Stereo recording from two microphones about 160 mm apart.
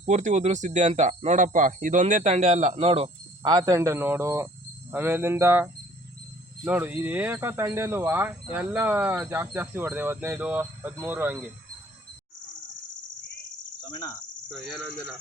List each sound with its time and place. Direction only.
0.0 s speech: 50° right (ahead or behind); by 11.3 s 10° right (ahead or behind)
13.9 s cricket: 20° left (ahead or behind)
14.5 s speech: centre (ahead or behind)